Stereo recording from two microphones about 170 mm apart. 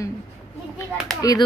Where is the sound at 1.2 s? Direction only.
25° left (ahead or behind).